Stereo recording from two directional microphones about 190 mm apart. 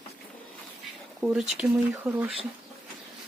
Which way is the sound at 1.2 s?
5° right (ahead or behind).